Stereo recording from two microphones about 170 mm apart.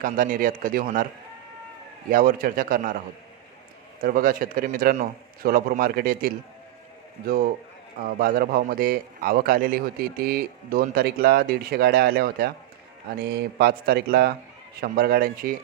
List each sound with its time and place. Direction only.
0.0 s speech: 55° right (ahead or behind)
2.0 s speech: 55° right (ahead or behind)
4.0 s speech: 55° right (ahead or behind)